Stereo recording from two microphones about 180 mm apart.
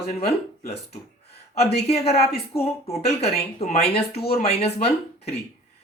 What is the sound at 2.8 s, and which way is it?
Speech, 35° left (ahead or behind).